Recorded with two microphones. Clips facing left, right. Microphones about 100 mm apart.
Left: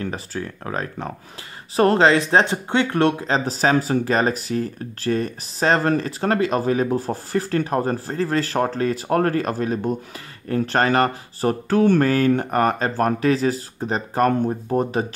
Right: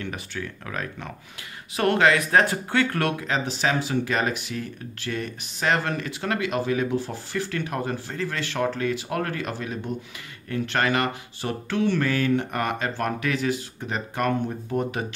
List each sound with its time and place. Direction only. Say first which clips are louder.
0.0 s speech: left 5 dB; 35° left (ahead or behind)